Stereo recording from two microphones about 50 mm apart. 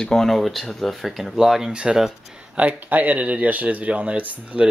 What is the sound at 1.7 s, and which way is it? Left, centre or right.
Speech, centre.